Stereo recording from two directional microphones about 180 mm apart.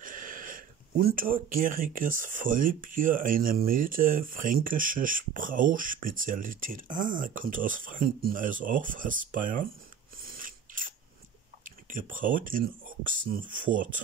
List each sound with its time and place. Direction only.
0.0 s speech: 50° right (ahead or behind)
10.2 s scissors: 50° right (ahead or behind)
11.6 s speech: 45° right (ahead or behind)